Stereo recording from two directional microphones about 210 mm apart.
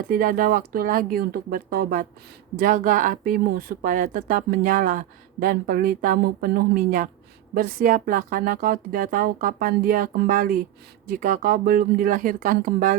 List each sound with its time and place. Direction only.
0.1 s speech: 40° right (ahead or behind)